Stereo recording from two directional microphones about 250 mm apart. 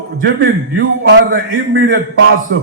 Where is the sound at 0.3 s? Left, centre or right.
Right.